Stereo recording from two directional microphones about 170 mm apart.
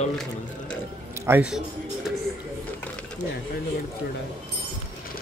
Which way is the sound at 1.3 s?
5° right (ahead or behind).